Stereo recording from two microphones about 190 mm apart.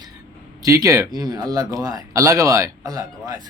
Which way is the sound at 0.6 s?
15° right (ahead or behind).